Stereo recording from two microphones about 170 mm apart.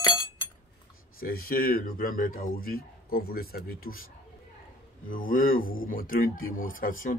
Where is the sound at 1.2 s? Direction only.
60° left (ahead or behind).